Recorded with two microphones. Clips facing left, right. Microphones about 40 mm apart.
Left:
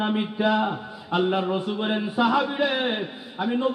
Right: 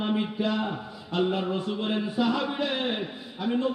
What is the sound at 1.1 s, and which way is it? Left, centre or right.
A man's voice, centre.